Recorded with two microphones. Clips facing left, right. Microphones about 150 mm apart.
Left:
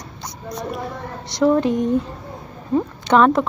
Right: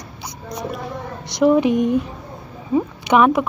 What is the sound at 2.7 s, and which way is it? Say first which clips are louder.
Speech: even; 10° right (ahead or behind).